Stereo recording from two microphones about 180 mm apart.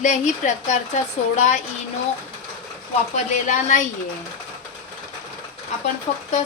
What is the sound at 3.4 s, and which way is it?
Speech, 45° left (ahead or behind).